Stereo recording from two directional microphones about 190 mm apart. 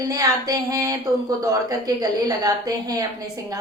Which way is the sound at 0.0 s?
20° right (ahead or behind).